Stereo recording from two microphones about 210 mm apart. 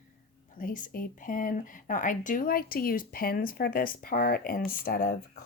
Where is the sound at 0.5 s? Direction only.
40° left (ahead or behind).